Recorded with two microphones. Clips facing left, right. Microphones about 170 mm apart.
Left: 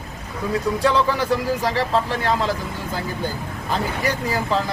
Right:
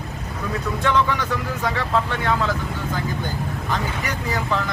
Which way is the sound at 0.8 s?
35° left (ahead or behind).